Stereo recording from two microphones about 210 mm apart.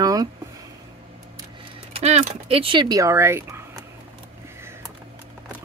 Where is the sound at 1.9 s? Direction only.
30° right (ahead or behind); by 3.6 s 10° right (ahead or behind).